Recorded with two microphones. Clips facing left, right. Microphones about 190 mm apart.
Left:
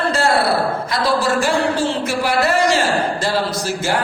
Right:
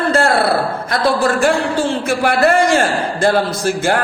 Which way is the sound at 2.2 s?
55° right (ahead or behind).